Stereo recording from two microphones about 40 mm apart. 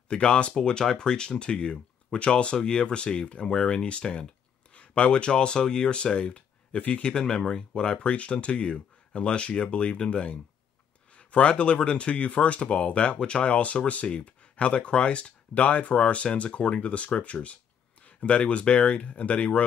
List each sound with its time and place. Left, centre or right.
0.1 s speech: left
8.1 s speech: left